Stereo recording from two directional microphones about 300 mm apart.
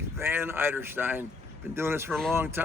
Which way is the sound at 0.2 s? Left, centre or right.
Centre.